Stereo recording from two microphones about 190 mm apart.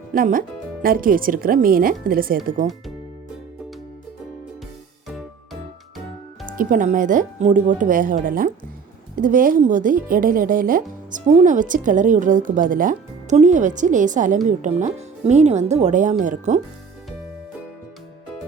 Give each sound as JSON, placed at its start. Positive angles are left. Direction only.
{"t": 0.1, "sound": "speech", "side_deg": -50}
{"t": 6.6, "sound": "speech", "side_deg": -45}